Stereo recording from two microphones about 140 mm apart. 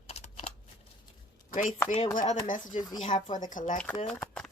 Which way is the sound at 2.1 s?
70° left (ahead or behind).